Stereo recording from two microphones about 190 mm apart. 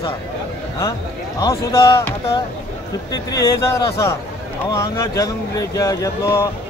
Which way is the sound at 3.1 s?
20° left (ahead or behind).